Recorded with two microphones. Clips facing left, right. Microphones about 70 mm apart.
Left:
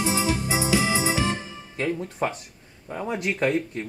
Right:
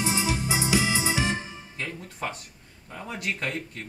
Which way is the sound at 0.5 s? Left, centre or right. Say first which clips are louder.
Left 2 dB; left.